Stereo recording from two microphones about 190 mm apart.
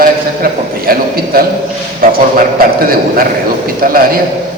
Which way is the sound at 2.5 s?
50° right (ahead or behind).